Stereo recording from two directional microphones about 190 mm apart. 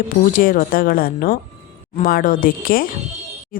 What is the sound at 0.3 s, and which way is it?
Speech, 45° left (ahead or behind).